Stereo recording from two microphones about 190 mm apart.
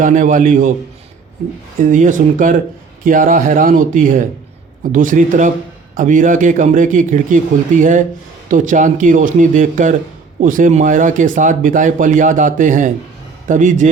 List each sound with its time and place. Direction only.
0.0 s speech: 45° right (ahead or behind)
1.9 s a man's voice: 45° right (ahead or behind)